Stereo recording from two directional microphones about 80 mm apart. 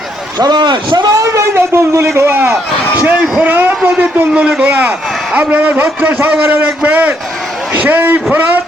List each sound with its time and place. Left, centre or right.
0.3 s speech: right
1.2 s speech: right
2.3 s a man's voice: right
4.3 s a man's voice: centre
4.6 s a man's voice: right